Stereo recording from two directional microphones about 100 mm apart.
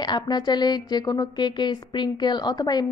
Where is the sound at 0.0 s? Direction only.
45° left (ahead or behind).